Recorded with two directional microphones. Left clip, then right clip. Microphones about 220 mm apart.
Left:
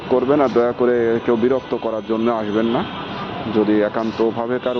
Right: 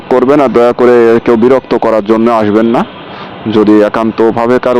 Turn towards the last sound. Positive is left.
turn(degrees=-50)  # may be behind; listen again after turning